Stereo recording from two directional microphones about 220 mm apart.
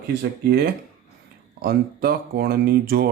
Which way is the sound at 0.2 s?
45° right (ahead or behind).